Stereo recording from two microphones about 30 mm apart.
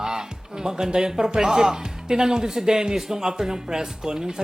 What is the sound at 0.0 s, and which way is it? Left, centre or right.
A man's voice, right.